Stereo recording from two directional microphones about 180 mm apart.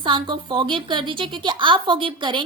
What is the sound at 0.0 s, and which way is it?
A woman's voice, 25° right (ahead or behind).